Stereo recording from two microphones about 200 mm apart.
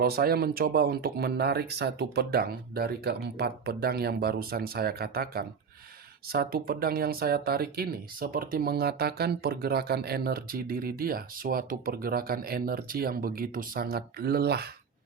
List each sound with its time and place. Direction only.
0.0 s speech: 50° right (ahead or behind)